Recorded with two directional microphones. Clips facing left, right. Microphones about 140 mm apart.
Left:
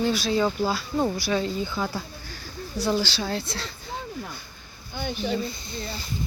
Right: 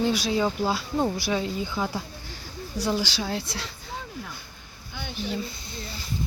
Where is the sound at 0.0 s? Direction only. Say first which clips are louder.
Left 1 dB; 15° right (ahead or behind).